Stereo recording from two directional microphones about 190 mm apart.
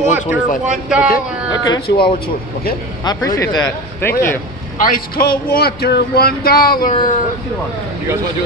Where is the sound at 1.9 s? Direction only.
60° left (ahead or behind).